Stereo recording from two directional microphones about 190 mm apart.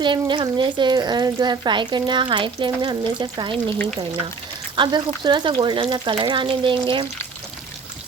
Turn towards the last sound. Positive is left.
turn(degrees=-25)  # may be behind; listen again after turning